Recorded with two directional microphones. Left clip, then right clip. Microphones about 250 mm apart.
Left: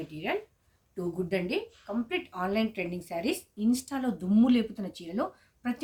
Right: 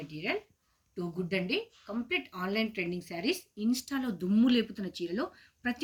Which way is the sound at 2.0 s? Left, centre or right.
Centre.